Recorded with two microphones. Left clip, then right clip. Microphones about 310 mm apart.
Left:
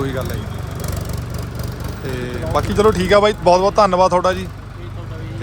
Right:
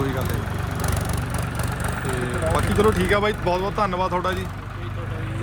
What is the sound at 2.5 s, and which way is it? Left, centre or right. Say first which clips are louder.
A man's voice: left 6 dB; centre.